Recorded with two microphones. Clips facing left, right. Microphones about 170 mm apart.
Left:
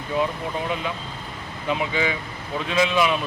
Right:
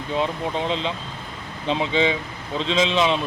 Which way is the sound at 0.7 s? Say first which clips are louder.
Right 2 dB; 25° right (ahead or behind).